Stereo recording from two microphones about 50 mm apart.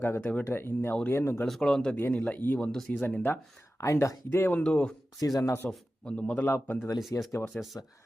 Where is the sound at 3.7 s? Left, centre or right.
Left.